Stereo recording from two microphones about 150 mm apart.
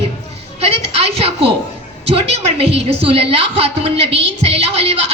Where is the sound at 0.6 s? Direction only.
45° right (ahead or behind).